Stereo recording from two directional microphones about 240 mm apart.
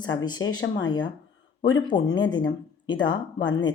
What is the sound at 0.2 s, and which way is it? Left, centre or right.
Speech, centre.